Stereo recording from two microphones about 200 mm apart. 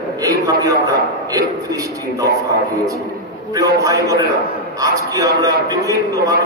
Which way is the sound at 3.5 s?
15° right (ahead or behind).